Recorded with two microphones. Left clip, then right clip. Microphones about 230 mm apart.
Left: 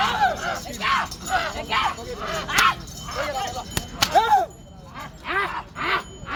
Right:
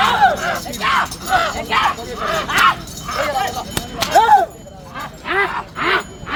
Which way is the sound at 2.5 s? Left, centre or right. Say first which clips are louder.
Right 5 dB; left.